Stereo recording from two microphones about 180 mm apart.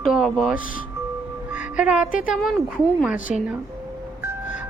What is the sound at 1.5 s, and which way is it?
Music, 5° right (ahead or behind).